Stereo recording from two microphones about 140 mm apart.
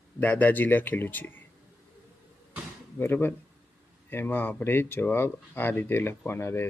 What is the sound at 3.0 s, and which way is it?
Speech, 15° left (ahead or behind).